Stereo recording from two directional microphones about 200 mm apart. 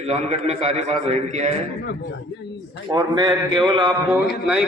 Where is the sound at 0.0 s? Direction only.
35° right (ahead or behind).